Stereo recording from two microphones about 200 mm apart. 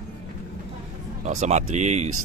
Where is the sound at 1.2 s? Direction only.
35° right (ahead or behind).